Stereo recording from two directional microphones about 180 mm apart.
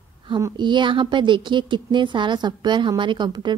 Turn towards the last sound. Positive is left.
turn(degrees=-25)  # may be behind; listen again after turning